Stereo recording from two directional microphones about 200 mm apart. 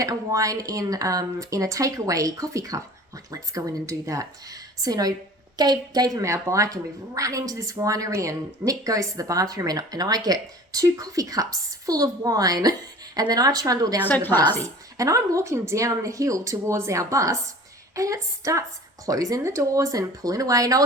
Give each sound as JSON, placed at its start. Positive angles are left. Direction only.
{"t": 0.0, "sound": "a woman's voice", "side_deg": -15}
{"t": 14.3, "sound": "a woman's voice", "side_deg": 10}
{"t": 14.9, "sound": "speech", "side_deg": -15}